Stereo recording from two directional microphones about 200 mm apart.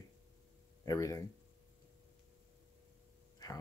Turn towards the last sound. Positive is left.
turn(degrees=20)  # may be behind; listen again after turning